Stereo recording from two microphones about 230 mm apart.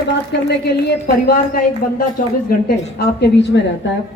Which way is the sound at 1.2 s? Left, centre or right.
Left.